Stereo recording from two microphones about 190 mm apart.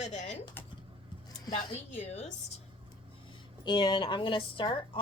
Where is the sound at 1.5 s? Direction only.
35° left (ahead or behind).